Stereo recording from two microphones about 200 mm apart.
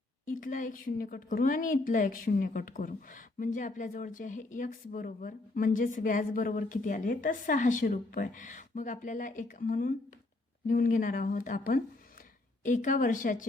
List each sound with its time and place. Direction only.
0.3 s a woman's voice: 45° left (ahead or behind)